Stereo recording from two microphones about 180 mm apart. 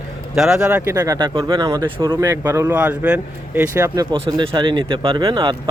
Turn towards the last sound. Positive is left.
turn(degrees=-25)  # may be behind; listen again after turning